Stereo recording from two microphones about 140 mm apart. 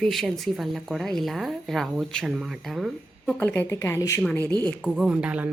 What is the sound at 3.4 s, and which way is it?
Speech, 15° left (ahead or behind).